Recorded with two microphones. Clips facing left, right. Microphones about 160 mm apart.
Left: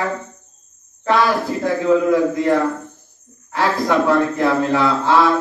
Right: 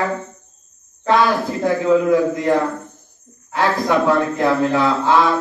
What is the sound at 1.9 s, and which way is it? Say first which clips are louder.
A man's voice: even; 20° right (ahead or behind).